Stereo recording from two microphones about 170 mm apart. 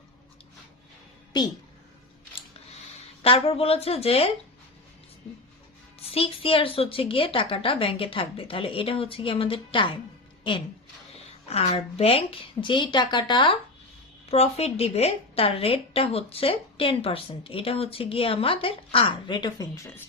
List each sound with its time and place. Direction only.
1.3 s a woman's voice: 25° left (ahead or behind)
3.2 s a woman's voice: 35° left (ahead or behind)
6.0 s a woman's voice: 35° left (ahead or behind); by 20.0 s 15° left (ahead or behind)